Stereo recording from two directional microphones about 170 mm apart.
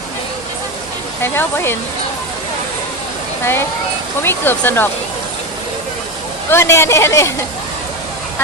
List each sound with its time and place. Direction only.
1.2 s a woman's voice: 15° left (ahead or behind)
3.4 s a woman's voice: 15° left (ahead or behind)
6.5 s a woman's voice: 15° left (ahead or behind)